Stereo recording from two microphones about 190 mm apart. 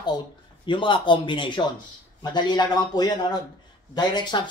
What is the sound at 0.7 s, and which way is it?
Speech, 25° left (ahead or behind).